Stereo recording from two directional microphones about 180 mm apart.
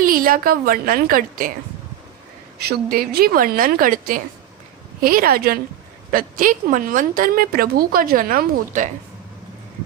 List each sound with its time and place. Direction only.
0.0 s a woman's voice: 50° right (ahead or behind)
2.6 s a woman's voice: 60° right (ahead or behind)